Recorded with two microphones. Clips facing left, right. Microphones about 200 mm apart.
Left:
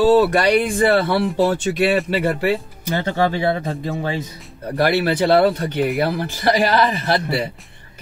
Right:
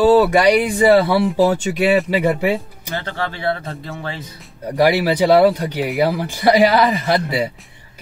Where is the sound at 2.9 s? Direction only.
20° left (ahead or behind).